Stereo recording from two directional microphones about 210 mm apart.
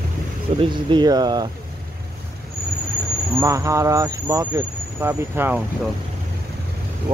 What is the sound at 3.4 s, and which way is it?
Speech, 15° right (ahead or behind).